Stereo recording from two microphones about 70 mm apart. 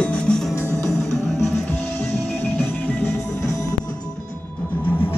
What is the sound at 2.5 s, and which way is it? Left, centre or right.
Music, left.